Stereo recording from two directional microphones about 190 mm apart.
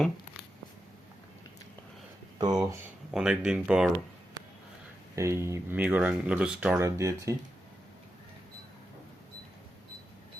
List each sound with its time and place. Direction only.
2.4 s speech: 20° right (ahead or behind)
3.1 s speech: 5° right (ahead or behind)
5.1 s speech: 15° right (ahead or behind)